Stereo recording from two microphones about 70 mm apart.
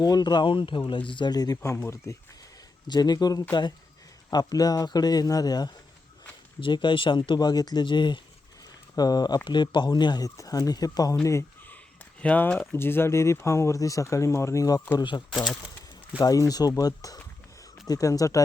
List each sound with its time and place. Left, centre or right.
0.0 s speech: left
2.0 s speech: left
2.8 s speech: left
6.8 s speech: left
9.0 s speech: left
10.2 s speech: left
11.2 s speech: left
12.2 s speech: centre
12.5 s speech: left
16.1 s speech: left